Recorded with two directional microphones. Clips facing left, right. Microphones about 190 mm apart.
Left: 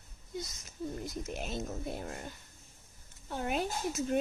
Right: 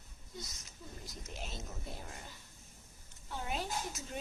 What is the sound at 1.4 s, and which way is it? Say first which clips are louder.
Speech: left 5 dB; 60° left (ahead or behind).